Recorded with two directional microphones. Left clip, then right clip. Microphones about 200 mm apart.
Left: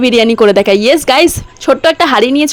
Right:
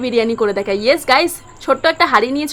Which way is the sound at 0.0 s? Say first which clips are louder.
Left 8 dB; 40° left (ahead or behind).